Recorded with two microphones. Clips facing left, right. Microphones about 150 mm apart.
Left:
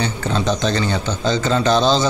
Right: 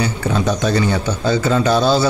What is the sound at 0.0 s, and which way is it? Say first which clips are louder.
Speech: right 2 dB; 10° right (ahead or behind).